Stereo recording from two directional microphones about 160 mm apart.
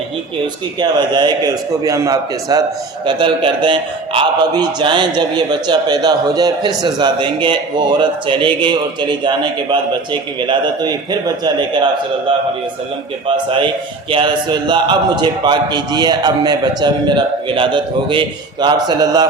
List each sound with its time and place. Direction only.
0.8 s a man's voice: 25° right (ahead or behind)
13.2 s a man's voice: 30° right (ahead or behind)